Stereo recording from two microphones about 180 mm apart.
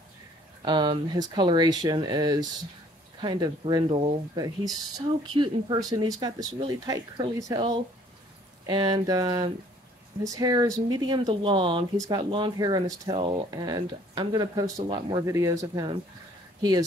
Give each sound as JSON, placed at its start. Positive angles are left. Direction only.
{"t": 0.6, "sound": "speech", "side_deg": -25}
{"t": 8.6, "sound": "speech", "side_deg": -25}